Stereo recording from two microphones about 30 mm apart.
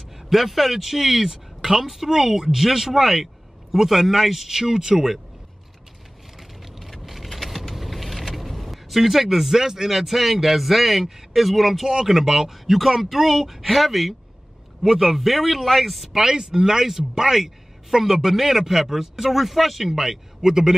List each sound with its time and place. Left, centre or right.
0.1 s speech: centre
6.3 s vehicle: centre
9.6 s speech: centre
9.9 s speech: centre
12.1 s speech: centre
16.2 s speech: right; by 19.9 s centre
19.9 s speech: centre